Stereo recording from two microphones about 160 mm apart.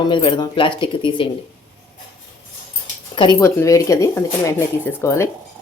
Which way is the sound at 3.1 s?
30° left (ahead or behind).